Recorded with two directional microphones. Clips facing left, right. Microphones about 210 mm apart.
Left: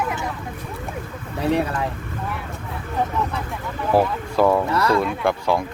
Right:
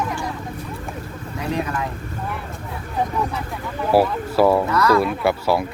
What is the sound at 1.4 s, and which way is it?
Speech, 30° left (ahead or behind).